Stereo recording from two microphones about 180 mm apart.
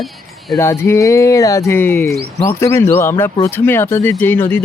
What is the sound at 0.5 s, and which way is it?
Speech, 15° left (ahead or behind).